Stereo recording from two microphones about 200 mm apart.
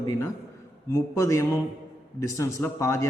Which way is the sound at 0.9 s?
15° left (ahead or behind).